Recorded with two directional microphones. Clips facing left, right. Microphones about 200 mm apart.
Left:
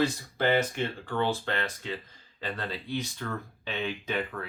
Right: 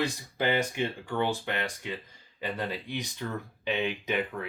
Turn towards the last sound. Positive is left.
turn(degrees=-15)  # may be behind; listen again after turning